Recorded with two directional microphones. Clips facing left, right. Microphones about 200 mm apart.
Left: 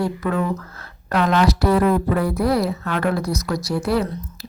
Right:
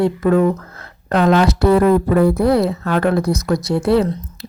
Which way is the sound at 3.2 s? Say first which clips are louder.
Right 6 dB; 25° right (ahead or behind).